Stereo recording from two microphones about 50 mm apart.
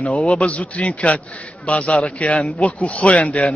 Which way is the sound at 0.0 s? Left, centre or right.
Left.